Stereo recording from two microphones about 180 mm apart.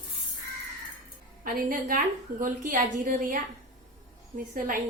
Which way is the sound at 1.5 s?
55° right (ahead or behind).